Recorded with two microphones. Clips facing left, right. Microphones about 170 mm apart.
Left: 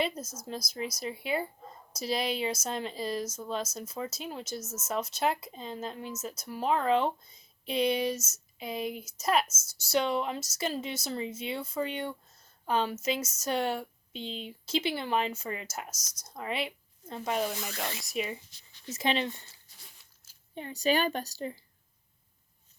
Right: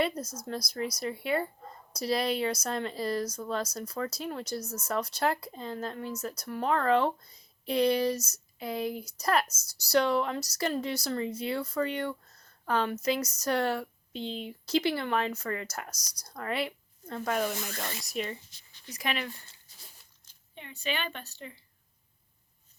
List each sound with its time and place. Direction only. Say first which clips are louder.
0.2 s speech: right 3 dB; 25° left (ahead or behind)
17.7 s speech: left 1 dB; centre (ahead or behind)
18.9 s speech: left 4 dB; 25° left (ahead or behind)
20.6 s a woman's voice: left 7 dB; 40° left (ahead or behind)